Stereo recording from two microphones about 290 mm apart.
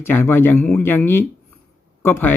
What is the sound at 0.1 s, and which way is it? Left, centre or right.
Speech, centre.